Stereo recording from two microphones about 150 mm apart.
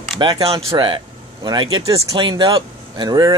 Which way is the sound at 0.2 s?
35° right (ahead or behind).